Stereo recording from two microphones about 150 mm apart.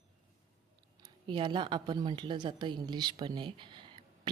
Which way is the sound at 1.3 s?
30° right (ahead or behind).